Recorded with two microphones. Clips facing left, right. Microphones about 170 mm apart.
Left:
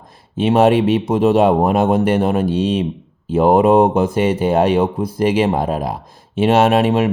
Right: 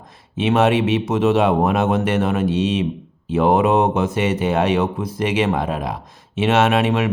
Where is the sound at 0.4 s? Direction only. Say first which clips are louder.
Left 4 dB; 35° left (ahead or behind).